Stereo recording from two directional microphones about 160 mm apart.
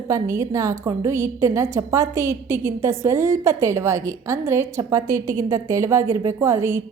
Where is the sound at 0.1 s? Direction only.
20° right (ahead or behind).